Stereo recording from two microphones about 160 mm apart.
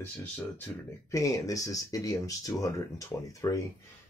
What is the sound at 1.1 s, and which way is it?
Speech, 20° left (ahead or behind).